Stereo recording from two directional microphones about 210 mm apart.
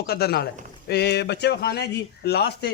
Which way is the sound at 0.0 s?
50° left (ahead or behind).